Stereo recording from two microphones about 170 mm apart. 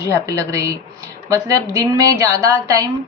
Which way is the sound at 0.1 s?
20° right (ahead or behind).